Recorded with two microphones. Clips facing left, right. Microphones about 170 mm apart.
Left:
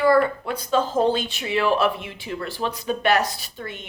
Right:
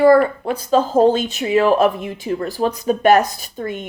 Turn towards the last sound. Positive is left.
turn(degrees=-45)  # may be behind; listen again after turning